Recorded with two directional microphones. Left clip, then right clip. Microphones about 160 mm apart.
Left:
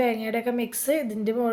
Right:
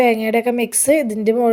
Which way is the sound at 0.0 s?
45° right (ahead or behind).